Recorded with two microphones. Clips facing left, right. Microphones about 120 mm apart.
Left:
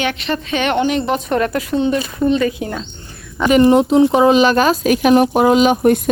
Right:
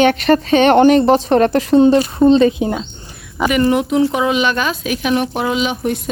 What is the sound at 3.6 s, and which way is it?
Speech, 30° left (ahead or behind).